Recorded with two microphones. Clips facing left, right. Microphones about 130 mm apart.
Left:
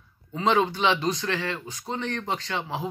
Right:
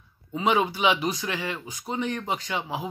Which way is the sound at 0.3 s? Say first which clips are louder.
Left 1 dB; 10° right (ahead or behind).